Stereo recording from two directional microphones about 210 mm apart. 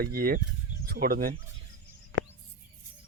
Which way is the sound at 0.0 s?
45° right (ahead or behind).